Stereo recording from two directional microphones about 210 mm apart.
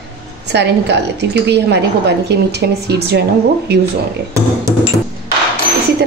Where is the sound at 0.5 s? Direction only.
55° right (ahead or behind).